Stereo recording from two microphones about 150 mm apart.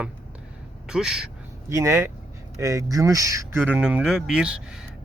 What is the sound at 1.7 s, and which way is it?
Speech, 20° right (ahead or behind).